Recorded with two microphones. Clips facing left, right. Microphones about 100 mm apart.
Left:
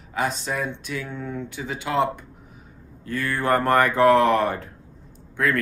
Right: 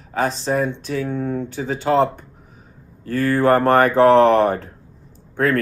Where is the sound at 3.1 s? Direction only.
40° right (ahead or behind).